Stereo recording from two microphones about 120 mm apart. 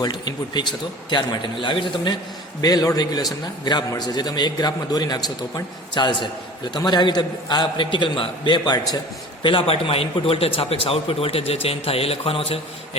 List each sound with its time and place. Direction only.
0.0 s a man's voice: 35° left (ahead or behind)
2.6 s a man's voice: 30° left (ahead or behind); by 13.0 s 55° left (ahead or behind)